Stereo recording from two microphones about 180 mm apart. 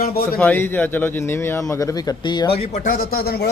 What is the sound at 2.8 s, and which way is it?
Speech, 55° left (ahead or behind).